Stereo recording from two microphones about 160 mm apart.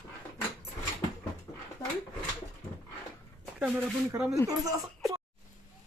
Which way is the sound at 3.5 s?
5° right (ahead or behind).